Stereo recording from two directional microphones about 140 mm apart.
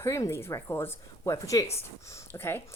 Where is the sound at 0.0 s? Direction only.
20° left (ahead or behind).